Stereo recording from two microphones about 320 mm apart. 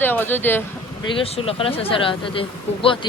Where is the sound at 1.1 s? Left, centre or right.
Centre.